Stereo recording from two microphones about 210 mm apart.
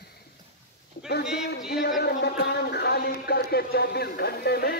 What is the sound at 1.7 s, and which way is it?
Speech, 50° left (ahead or behind).